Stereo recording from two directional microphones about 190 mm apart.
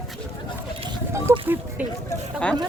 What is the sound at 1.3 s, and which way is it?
Speech, 15° right (ahead or behind).